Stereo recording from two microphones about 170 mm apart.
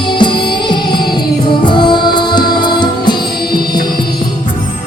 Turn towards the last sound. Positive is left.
turn(degrees=25)  # may be behind; listen again after turning